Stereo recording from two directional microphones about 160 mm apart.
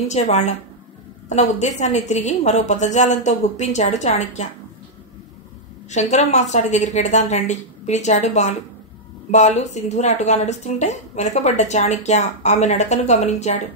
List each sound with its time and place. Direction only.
0.1 s a woman's voice: 45° left (ahead or behind)
5.9 s a woman's voice: 45° left (ahead or behind)